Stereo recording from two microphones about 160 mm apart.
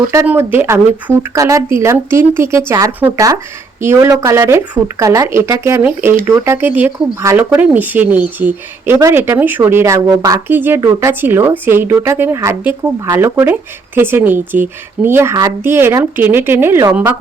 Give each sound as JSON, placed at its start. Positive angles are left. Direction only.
{"t": 0.3, "sound": "speech", "side_deg": -15}
{"t": 10.5, "sound": "speech", "side_deg": -15}